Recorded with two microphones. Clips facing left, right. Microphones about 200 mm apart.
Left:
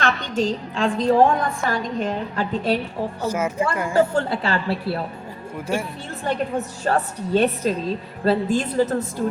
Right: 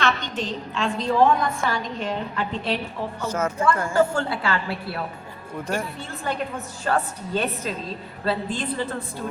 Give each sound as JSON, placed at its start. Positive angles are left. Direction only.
{"t": 0.0, "sound": "a woman's voice", "side_deg": 40}
{"t": 3.2, "sound": "a woman's voice", "side_deg": 10}
{"t": 3.9, "sound": "a woman's voice", "side_deg": 35}
{"t": 6.8, "sound": "a woman's voice", "side_deg": 40}